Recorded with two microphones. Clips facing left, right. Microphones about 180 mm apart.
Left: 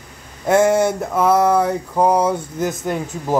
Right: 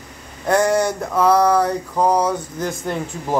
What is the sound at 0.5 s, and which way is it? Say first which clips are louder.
Speech: left 3 dB; 25° left (ahead or behind).